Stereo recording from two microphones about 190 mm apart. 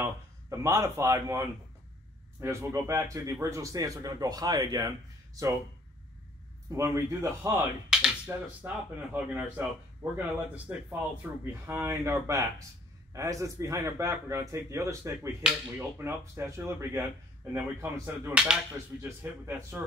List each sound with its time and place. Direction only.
0.0 s speech: 15° right (ahead or behind)
6.7 s speech: 15° right (ahead or behind)